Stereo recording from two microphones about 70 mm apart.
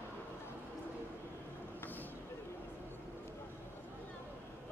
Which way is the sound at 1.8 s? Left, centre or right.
Left.